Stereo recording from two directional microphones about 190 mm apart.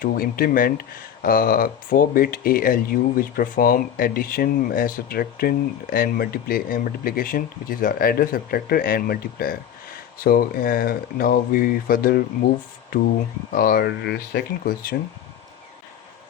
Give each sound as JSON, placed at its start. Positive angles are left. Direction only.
{"t": 0.0, "sound": "speech", "side_deg": 50}
{"t": 13.5, "sound": "speech", "side_deg": 50}
{"t": 14.6, "sound": "speech", "side_deg": 50}